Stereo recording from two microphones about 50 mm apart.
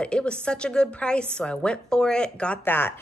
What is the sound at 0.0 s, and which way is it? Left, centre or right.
Speech, left.